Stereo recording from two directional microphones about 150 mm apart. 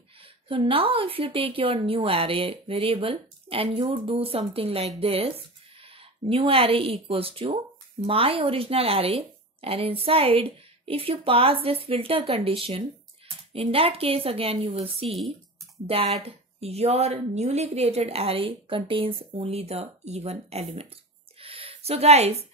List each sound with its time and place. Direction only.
0.5 s a woman's voice: 35° right (ahead or behind)
16.2 s a woman's voice: 45° right (ahead or behind)
21.4 s a sound: 40° right (ahead or behind)